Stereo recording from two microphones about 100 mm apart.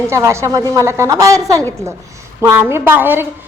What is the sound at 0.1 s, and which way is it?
A woman's voice, 30° right (ahead or behind).